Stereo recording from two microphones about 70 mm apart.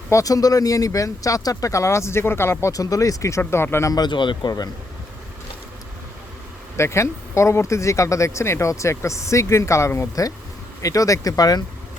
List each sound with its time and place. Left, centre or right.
0.1 s speech: left
2.7 s speech: left
3.8 s speech: left
6.7 s speech: left